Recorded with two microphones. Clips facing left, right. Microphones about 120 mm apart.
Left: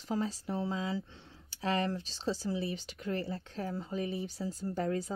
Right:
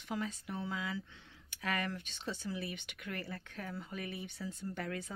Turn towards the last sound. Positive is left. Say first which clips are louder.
# left 7 dB
turn(degrees=35)  # may be behind; listen again after turning